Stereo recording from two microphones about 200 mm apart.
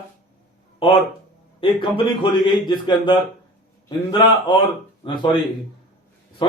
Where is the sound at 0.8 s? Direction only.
25° left (ahead or behind).